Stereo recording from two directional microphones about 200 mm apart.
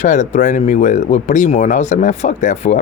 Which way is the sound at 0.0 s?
35° left (ahead or behind).